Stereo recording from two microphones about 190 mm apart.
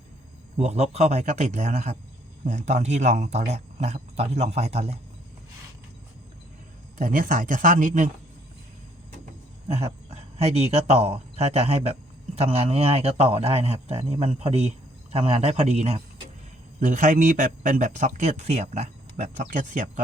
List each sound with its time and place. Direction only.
0.5 s speech: 35° right (ahead or behind)
7.0 s speech: 45° right (ahead or behind)
10.3 s speech: 35° right (ahead or behind)